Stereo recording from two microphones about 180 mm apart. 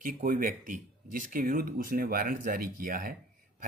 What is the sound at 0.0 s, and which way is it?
Speech, 50° right (ahead or behind).